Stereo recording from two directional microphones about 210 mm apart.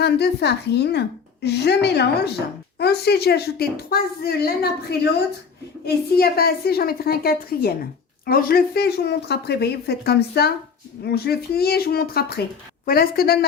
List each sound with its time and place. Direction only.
0.0 s speech: 50° left (ahead or behind)